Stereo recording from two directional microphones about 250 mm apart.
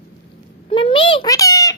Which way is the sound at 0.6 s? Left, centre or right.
Left.